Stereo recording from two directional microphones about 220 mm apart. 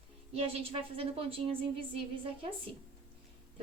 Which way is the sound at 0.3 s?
25° right (ahead or behind).